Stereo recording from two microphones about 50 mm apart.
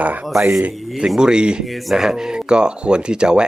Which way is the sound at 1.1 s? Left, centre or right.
Centre.